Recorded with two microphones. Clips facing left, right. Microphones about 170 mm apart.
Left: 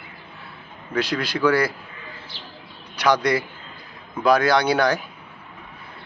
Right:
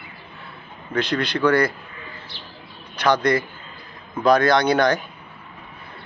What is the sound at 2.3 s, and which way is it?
Bird, 90° left.